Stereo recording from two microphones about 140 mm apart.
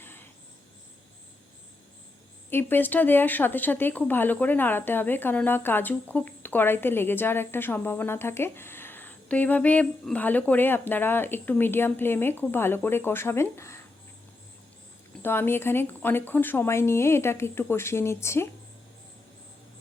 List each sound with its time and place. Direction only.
0.0 s cricket: 15° left (ahead or behind)
2.5 s speech: 15° left (ahead or behind)
15.2 s speech: 15° left (ahead or behind)